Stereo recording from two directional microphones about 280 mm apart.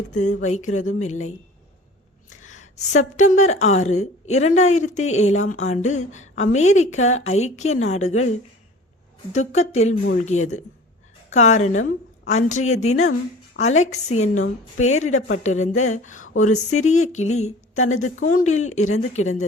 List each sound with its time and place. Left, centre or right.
0.1 s a woman's voice: left
2.3 s a woman's voice: left
15.0 s a woman's voice: left
15.4 s a woman's voice: left